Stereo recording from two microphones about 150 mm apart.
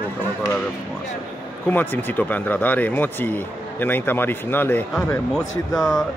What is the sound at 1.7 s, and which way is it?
Speech, 15° left (ahead or behind).